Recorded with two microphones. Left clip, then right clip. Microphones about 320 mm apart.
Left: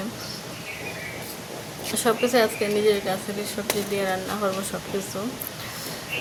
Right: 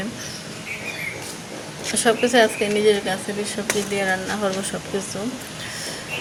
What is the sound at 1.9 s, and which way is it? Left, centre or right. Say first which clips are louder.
Speech: right 4 dB; left.